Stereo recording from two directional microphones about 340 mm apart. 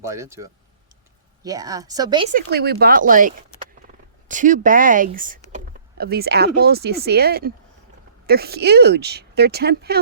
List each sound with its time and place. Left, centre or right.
0.0 s a woman's voice: centre
2.3 s speech: right